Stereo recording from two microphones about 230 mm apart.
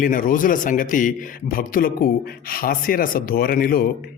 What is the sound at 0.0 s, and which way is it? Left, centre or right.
Speech, left.